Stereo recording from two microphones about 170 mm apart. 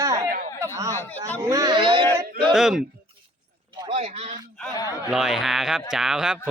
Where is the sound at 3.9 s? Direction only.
40° right (ahead or behind).